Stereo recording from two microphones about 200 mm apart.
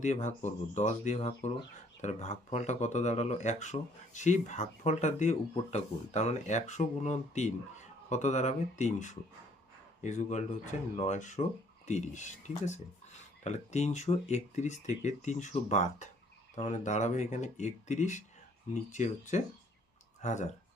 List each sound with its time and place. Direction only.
0.0 s speech: 35° left (ahead or behind)